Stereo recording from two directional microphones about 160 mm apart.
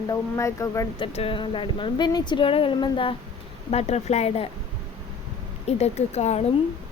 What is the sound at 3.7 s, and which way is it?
Speech, 40° left (ahead or behind).